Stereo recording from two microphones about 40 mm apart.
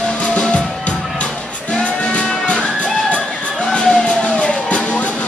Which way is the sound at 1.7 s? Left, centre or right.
Left.